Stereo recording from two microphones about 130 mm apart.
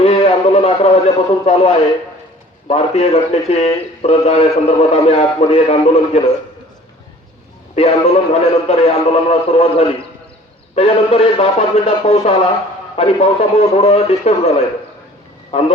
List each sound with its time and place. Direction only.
0.0 s a sound: 50° left (ahead or behind)
2.6 s speech: 50° left (ahead or behind)
7.8 s speech: 50° left (ahead or behind)